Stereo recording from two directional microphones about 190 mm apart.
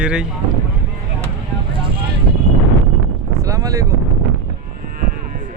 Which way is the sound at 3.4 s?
20° right (ahead or behind).